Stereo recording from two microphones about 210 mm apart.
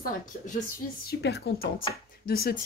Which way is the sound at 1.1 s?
50° left (ahead or behind).